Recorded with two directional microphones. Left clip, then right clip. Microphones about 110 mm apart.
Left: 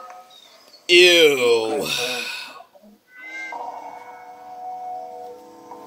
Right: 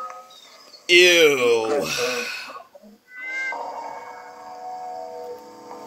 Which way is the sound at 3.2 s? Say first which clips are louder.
Right 5 dB; 45° right (ahead or behind).